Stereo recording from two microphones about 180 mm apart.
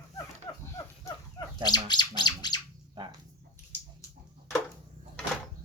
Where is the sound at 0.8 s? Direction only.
15° left (ahead or behind).